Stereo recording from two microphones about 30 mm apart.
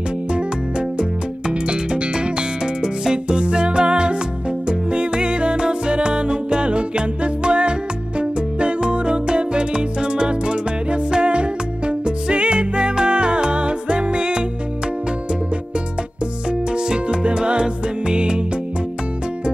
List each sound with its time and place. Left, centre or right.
0.3 s music: right
16.4 s music: right